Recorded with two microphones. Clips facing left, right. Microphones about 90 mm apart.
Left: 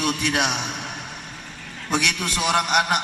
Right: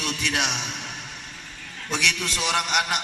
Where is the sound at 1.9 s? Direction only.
15° left (ahead or behind).